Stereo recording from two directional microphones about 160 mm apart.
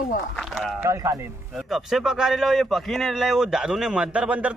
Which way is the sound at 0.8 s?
20° right (ahead or behind).